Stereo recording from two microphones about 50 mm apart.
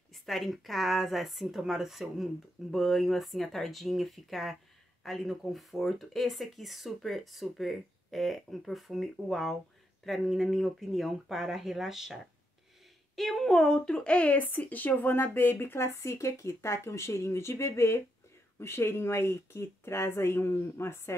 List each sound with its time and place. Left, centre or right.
0.1 s speech: centre
13.1 s a woman's voice: centre; by 21.1 s left